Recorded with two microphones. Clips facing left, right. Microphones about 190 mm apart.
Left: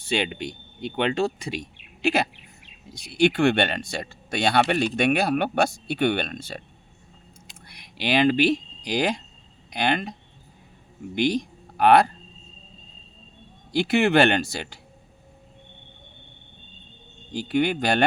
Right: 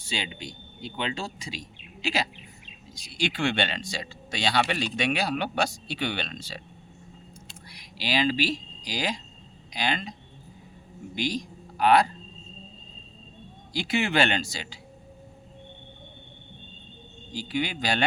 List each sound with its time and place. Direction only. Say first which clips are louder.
0.0 s speech: left 9 dB; 60° left (ahead or behind)
7.7 s speech: left 5 dB; 60° left (ahead or behind)
13.7 s speech: left 6 dB; 60° left (ahead or behind)
17.3 s speech: left 7 dB; 55° left (ahead or behind)